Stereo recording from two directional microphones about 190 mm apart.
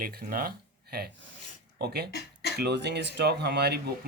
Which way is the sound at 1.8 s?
55° right (ahead or behind).